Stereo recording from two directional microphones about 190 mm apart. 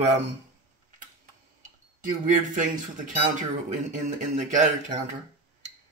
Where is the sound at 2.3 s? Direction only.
45° right (ahead or behind).